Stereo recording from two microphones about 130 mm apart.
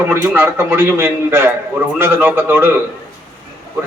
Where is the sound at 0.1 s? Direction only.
20° right (ahead or behind).